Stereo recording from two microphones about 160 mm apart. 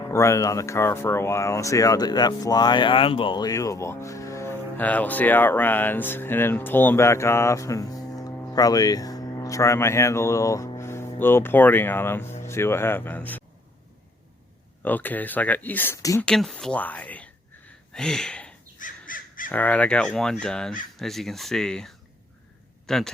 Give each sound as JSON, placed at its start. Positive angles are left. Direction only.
{"t": 0.1, "sound": "speech", "side_deg": 20}
{"t": 14.8, "sound": "speech", "side_deg": 10}
{"t": 16.2, "sound": "speech", "side_deg": 5}
{"t": 17.9, "sound": "a sound", "side_deg": 5}
{"t": 18.8, "sound": "crow", "side_deg": 60}
{"t": 19.5, "sound": "speech", "side_deg": 10}